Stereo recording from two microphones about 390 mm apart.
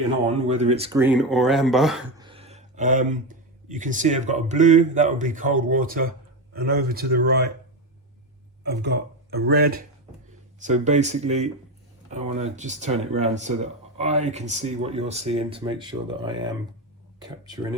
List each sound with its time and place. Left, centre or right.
0.4 s speech: centre
1.0 s speech: centre
2.2 s speech: centre
8.6 s speech: right